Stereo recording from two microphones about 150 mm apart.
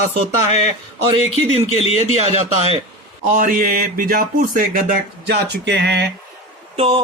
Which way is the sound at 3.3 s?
65° right (ahead or behind).